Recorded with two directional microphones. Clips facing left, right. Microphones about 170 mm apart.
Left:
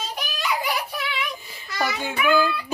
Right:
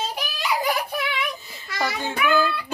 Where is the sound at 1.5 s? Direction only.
15° left (ahead or behind).